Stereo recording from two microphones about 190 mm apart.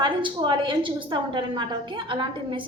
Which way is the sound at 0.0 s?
25° right (ahead or behind).